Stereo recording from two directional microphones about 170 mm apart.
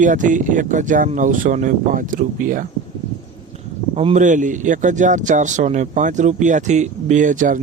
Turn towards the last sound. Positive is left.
turn(degrees=-50)  # may be behind; listen again after turning